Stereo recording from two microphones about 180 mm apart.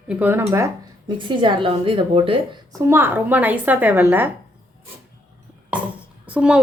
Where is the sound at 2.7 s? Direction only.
15° right (ahead or behind).